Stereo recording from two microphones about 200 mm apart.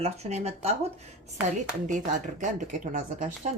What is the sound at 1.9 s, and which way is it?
Speech, 40° right (ahead or behind).